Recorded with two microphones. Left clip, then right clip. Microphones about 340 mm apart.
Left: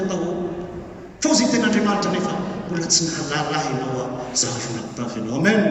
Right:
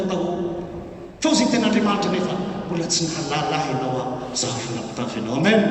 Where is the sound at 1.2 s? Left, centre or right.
Centre.